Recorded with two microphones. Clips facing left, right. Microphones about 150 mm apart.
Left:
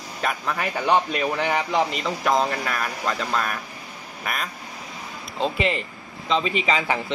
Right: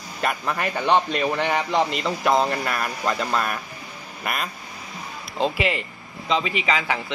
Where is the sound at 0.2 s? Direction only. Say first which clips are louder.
Right 1 dB; 5° right (ahead or behind).